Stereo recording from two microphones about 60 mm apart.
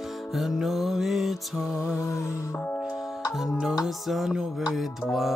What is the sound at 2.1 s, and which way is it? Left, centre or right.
Music, left.